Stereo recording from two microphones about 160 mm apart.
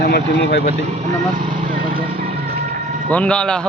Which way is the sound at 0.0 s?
90° left.